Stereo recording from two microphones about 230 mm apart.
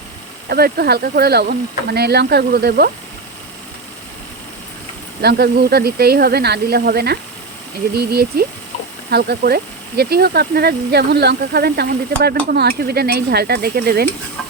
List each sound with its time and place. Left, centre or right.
0.5 s speech: right
5.2 s speech: right